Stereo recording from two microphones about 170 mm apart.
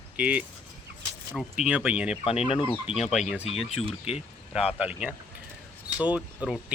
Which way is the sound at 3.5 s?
35° left (ahead or behind).